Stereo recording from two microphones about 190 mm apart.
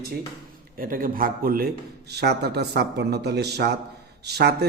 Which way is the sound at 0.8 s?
50° right (ahead or behind).